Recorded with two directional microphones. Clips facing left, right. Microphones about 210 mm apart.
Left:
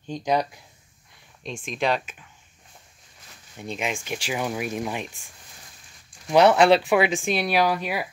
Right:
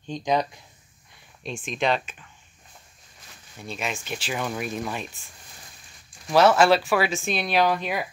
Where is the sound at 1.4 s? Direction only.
5° right (ahead or behind).